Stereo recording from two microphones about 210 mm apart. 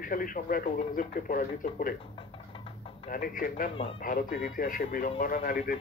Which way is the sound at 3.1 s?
45° left (ahead or behind).